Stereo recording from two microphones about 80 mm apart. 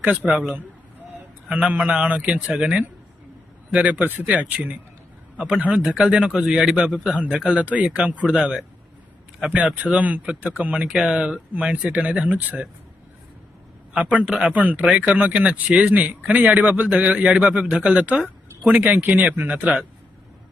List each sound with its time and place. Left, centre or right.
0.0 s a man's voice: centre
13.9 s a man's voice: centre
18.2 s a sound: centre
18.8 s a man's voice: right